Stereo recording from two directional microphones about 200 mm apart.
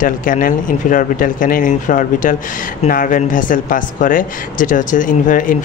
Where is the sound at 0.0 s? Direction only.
45° left (ahead or behind).